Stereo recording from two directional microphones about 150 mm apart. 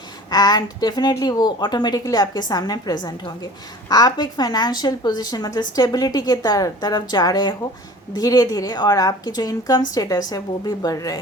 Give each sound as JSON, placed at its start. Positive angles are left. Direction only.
{"t": 0.3, "sound": "a woman's voice", "side_deg": 25}